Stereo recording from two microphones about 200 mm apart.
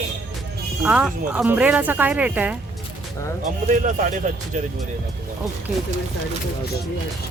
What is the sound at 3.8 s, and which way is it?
Speech, 35° right (ahead or behind).